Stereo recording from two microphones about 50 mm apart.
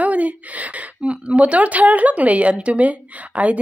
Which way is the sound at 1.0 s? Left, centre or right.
Right.